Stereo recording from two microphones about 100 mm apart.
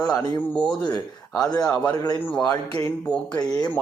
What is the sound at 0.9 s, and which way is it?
Speech, 45° left (ahead or behind).